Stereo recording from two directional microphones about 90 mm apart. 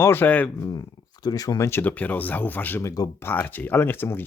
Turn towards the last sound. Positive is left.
turn(degrees=25)  # may be behind; listen again after turning